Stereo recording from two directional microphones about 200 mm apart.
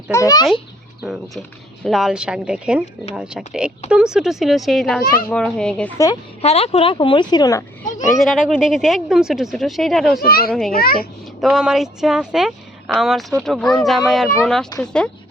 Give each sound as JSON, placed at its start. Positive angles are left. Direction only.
{"t": 0.1, "sound": "a child's voice", "side_deg": 15}
{"t": 1.0, "sound": "a woman's voice", "side_deg": -5}
{"t": 6.4, "sound": "speech", "side_deg": 30}
{"t": 8.2, "sound": "a woman's voice", "side_deg": 0}
{"t": 10.2, "sound": "a child's voice", "side_deg": 50}
{"t": 11.3, "sound": "a woman's voice", "side_deg": 0}